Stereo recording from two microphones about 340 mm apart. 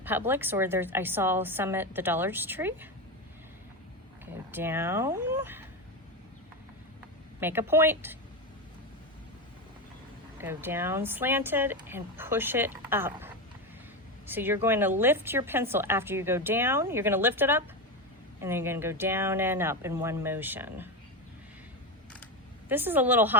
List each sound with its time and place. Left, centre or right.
0.0 s a woman's voice: centre
4.3 s speech: centre
7.3 s a woman's voice: centre
10.4 s a woman's voice: centre
22.7 s a woman's voice: centre